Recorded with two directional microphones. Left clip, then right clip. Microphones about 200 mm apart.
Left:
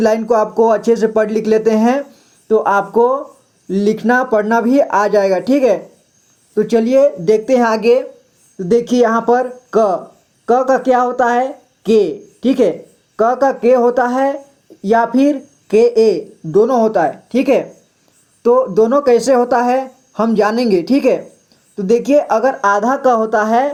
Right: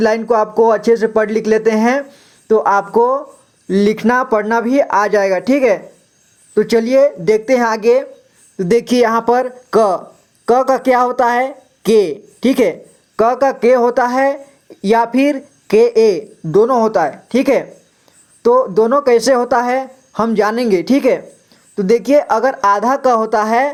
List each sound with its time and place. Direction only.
0.0 s speech: 15° right (ahead or behind)
18.7 s speech: 20° right (ahead or behind)